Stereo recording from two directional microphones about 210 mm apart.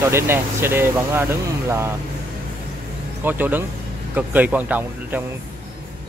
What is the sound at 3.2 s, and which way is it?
Speech, 10° right (ahead or behind).